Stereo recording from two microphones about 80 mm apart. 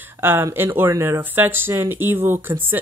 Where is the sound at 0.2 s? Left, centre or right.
Right.